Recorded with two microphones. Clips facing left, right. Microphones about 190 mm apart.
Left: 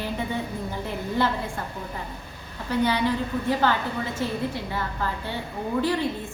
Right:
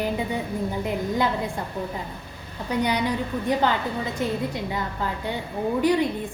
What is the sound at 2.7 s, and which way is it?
A woman's voice, 15° right (ahead or behind).